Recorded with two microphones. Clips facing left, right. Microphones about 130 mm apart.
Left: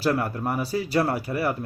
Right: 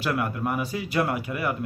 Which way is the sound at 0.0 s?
35° left (ahead or behind).